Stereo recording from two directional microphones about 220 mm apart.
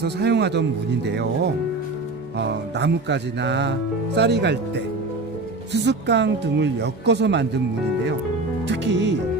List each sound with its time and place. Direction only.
0.0 s speech: 50° right (ahead or behind)
2.4 s speech: 50° right (ahead or behind)
8.6 s speech: 55° right (ahead or behind)